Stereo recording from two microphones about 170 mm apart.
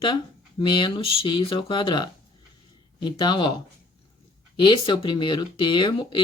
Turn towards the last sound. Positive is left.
turn(degrees=30)  # may be behind; listen again after turning